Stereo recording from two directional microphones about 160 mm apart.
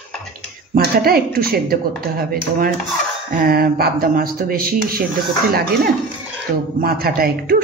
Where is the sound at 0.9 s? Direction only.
70° right (ahead or behind).